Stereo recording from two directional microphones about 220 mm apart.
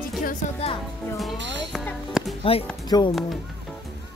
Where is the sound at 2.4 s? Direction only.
25° left (ahead or behind).